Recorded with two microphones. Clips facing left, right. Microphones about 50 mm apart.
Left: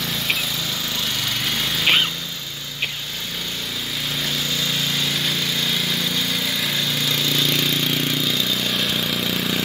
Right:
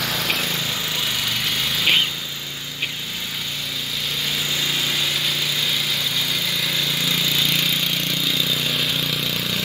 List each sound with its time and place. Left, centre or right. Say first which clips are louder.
0.0 s vehicle: right 1 dB; right
1.2 s lawn mower: even; centre
6.6 s vehicle: even; centre